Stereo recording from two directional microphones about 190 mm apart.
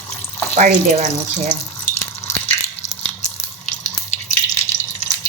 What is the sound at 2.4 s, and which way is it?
Biting, 35° left (ahead or behind).